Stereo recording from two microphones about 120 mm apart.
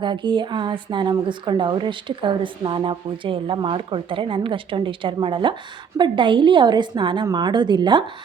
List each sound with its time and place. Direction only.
0.0 s a woman's voice: 40° right (ahead or behind)